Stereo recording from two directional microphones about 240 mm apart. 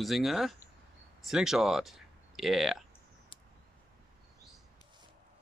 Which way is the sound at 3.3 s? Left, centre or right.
Left.